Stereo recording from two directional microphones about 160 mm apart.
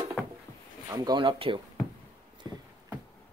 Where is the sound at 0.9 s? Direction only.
25° right (ahead or behind).